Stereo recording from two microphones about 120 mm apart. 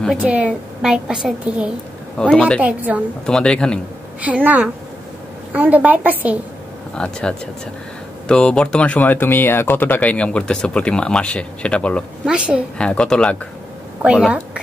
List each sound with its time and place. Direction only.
0.2 s a woman's voice: 10° right (ahead or behind)
2.1 s speech: 10° left (ahead or behind)
2.6 s a woman's voice: 10° right (ahead or behind)
3.3 s speech: 5° left (ahead or behind)
4.2 s a woman's voice: 15° right (ahead or behind)
7.0 s speech: 10° left (ahead or behind)
12.3 s a woman's voice: 10° right (ahead or behind)
12.7 s speech: 10° left (ahead or behind)